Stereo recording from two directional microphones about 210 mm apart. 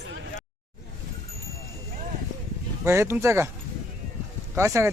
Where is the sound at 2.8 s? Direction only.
10° right (ahead or behind).